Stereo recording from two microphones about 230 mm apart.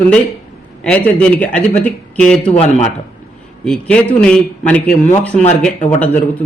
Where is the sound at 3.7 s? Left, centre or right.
Centre.